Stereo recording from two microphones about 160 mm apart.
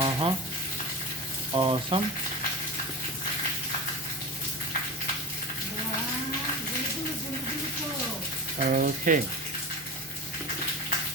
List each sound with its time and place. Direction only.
0.0 s frying: 30° right (ahead or behind)
1.5 s speech: 30° right (ahead or behind)
8.7 s speech: 60° right (ahead or behind)